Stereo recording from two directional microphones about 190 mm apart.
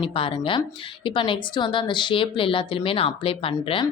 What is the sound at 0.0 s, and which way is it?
A woman's voice, 30° left (ahead or behind).